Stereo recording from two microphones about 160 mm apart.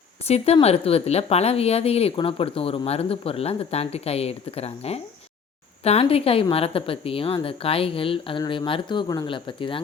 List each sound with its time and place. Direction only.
0.3 s speech: 40° left (ahead or behind)